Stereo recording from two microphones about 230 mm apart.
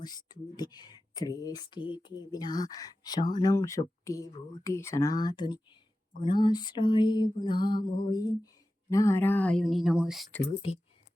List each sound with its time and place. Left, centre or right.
0.0 s speech: centre
6.2 s a sound: left
8.0 s speech: centre